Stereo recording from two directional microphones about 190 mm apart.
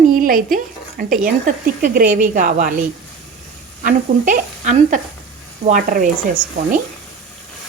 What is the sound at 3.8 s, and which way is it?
Speech, 45° right (ahead or behind).